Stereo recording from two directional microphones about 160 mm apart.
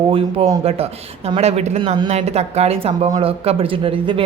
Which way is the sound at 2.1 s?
40° right (ahead or behind).